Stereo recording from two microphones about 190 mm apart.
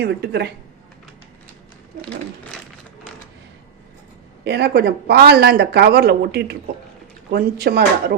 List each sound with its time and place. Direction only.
0.0 s speech: 60° right (ahead or behind)
4.4 s speech: 60° right (ahead or behind)